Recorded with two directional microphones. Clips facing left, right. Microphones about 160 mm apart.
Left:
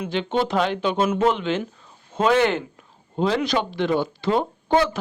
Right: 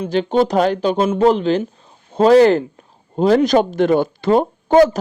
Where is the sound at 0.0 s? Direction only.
40° right (ahead or behind).